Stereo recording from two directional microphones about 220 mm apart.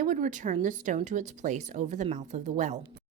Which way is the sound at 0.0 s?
35° right (ahead or behind).